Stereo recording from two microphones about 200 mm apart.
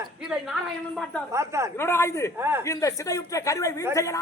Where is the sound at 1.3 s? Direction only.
15° right (ahead or behind).